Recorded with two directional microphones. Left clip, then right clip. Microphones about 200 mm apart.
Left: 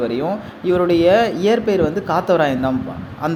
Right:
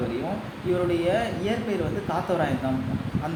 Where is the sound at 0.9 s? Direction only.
55° left (ahead or behind).